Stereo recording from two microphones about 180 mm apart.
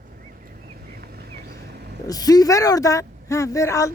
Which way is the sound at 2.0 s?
20° left (ahead or behind).